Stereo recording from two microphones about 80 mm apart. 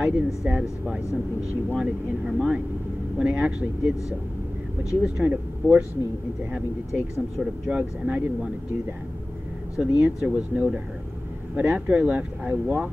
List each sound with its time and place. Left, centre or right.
0.0 s speech: centre
5.2 s speech: centre
6.5 s speech: centre
9.8 s speech: centre